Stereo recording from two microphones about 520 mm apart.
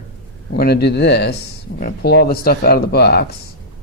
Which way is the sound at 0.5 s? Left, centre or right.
Centre.